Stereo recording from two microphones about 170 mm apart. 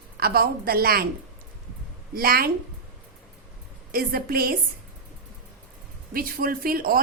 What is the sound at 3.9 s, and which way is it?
Speech, 60° right (ahead or behind).